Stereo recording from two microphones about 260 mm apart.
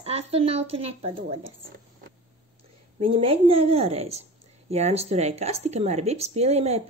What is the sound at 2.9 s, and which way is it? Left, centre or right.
Speech, right.